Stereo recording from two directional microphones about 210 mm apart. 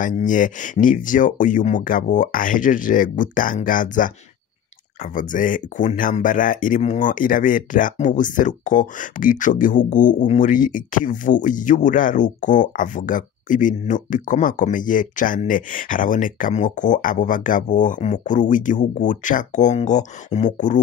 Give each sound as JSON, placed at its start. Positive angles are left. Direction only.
{"t": 0.0, "sound": "speech", "side_deg": 40}